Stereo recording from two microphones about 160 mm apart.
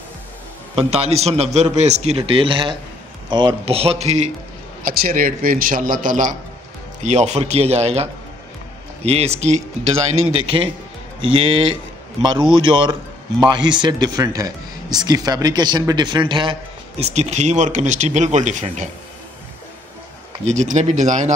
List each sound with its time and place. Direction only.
0.7 s a man's voice: 40° right (ahead or behind)
4.8 s a man's voice: 60° right (ahead or behind)
20.4 s speech: 45° right (ahead or behind)